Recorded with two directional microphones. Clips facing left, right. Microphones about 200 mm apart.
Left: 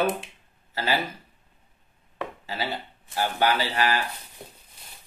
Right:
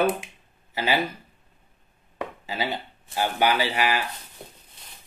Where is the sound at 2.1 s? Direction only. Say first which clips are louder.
Right 2 dB; 15° right (ahead or behind).